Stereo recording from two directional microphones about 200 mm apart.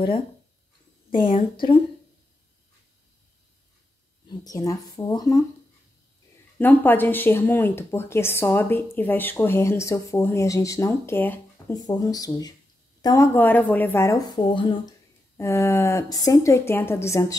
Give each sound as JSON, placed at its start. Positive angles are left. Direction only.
{"t": 4.5, "sound": "speech", "side_deg": 15}
{"t": 6.6, "sound": "speech", "side_deg": 10}
{"t": 15.3, "sound": "speech", "side_deg": 15}